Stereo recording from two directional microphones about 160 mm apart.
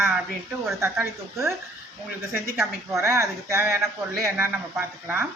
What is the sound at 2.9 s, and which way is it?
Speech, 15° right (ahead or behind).